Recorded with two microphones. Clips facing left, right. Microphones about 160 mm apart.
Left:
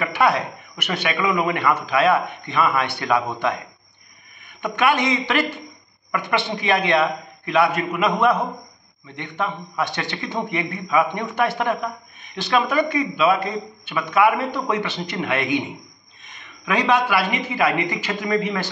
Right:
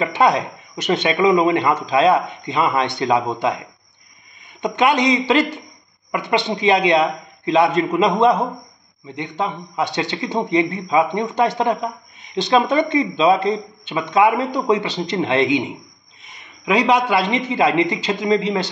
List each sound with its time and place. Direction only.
0.0 s speech: 20° right (ahead or behind)